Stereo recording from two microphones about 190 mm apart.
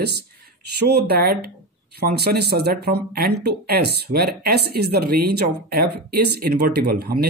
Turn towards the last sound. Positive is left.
turn(degrees=-55)  # may be behind; listen again after turning